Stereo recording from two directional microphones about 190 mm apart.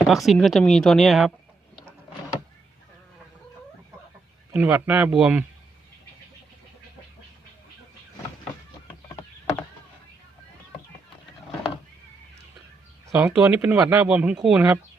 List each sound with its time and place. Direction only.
0.1 s speech: centre (ahead or behind)
4.5 s speech: 10° right (ahead or behind)
9.1 s a sound: 15° left (ahead or behind)
13.1 s speech: 10° right (ahead or behind)